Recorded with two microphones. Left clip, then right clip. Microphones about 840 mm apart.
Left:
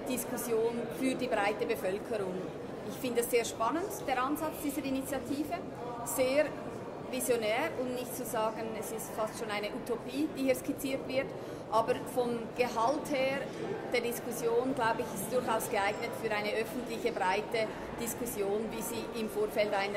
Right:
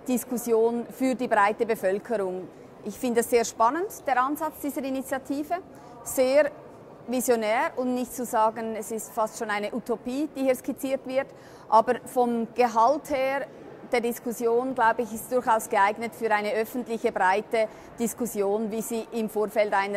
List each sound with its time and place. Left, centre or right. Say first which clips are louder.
0.1 s a woman's voice: right 9 dB; right